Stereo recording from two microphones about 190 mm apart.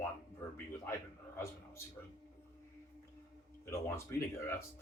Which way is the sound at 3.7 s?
15° left (ahead or behind).